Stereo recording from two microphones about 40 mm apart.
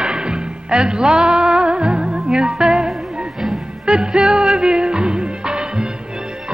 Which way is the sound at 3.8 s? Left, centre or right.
Centre.